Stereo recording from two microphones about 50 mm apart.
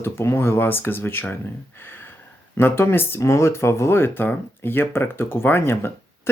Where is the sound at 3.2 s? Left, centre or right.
Left.